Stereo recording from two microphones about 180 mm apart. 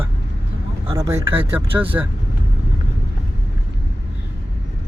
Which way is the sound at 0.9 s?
15° right (ahead or behind).